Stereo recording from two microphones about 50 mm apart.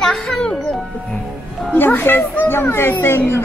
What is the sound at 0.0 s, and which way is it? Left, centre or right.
Music, centre.